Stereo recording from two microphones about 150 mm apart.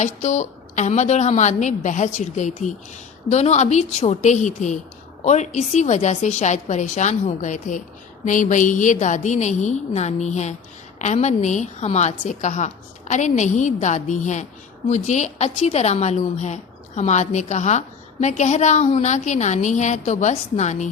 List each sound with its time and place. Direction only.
0.0 s a woman's voice: 50° left (ahead or behind)